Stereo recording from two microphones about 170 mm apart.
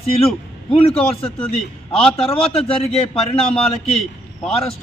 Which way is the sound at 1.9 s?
35° left (ahead or behind).